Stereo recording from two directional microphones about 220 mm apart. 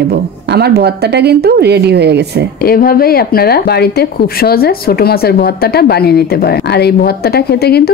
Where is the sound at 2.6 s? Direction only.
40° left (ahead or behind).